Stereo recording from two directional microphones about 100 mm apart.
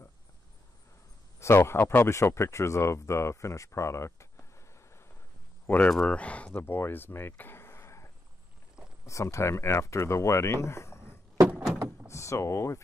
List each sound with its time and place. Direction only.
1.4 s speech: 25° left (ahead or behind)
5.7 s speech: 10° left (ahead or behind)
11.7 s door: 15° right (ahead or behind)
12.1 s speech: 30° left (ahead or behind)